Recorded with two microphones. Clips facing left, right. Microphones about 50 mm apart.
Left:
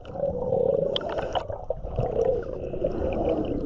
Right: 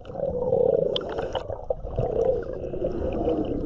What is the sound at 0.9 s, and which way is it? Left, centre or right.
Whale vocalization, left.